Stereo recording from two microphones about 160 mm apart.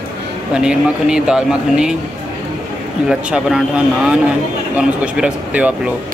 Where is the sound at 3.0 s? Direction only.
5° right (ahead or behind).